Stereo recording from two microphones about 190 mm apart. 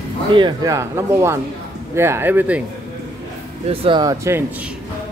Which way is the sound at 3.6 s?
30° right (ahead or behind).